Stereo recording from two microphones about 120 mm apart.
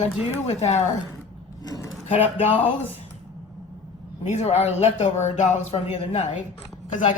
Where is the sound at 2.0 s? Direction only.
65° left (ahead or behind).